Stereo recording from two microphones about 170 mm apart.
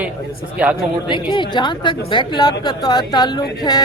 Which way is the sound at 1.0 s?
25° left (ahead or behind).